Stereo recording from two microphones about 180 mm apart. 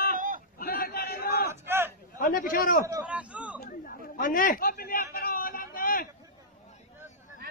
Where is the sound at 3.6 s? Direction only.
50° left (ahead or behind).